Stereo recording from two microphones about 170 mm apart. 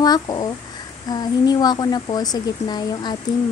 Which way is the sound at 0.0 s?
25° left (ahead or behind).